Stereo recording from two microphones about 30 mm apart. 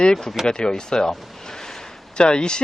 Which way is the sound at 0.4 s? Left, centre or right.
Left.